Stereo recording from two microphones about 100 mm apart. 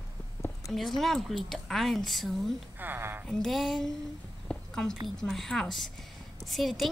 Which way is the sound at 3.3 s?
5° left (ahead or behind).